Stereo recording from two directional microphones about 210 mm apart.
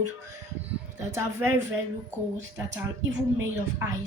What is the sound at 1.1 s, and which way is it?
Speech, 10° right (ahead or behind).